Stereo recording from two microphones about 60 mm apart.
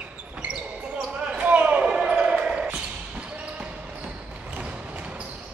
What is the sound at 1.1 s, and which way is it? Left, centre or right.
Basketball bounce, centre.